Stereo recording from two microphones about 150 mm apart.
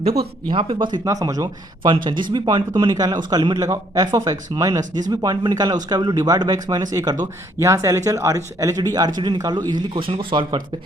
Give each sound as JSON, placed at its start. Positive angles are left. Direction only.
{"t": 0.4, "sound": "speech", "side_deg": -35}